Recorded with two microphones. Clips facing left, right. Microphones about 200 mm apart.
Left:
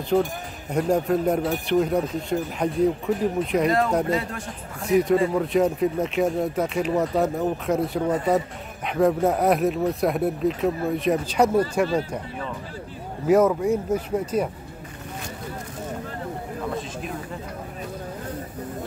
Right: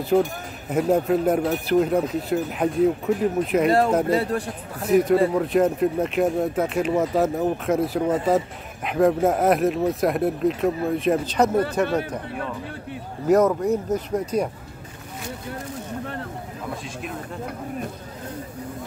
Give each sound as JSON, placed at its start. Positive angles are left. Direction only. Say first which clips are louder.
{"t": 0.1, "sound": "speech", "louder": "right 2 dB", "side_deg": 0}
{"t": 4.1, "sound": "a man's voice", "louder": "right 4 dB", "side_deg": -35}
{"t": 4.8, "sound": "speech", "louder": "right 2 dB", "side_deg": 0}
{"t": 11.4, "sound": "speech", "louder": "left 1 dB", "side_deg": 10}
{"t": 13.3, "sound": "speech", "louder": "even", "side_deg": 5}